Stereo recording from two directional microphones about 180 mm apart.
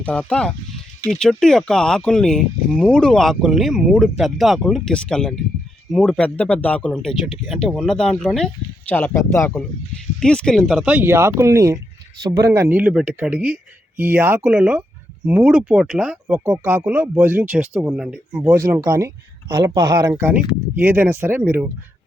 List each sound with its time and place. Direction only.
0.0 s speech: 5° left (ahead or behind)
18.5 s speech: 20° right (ahead or behind)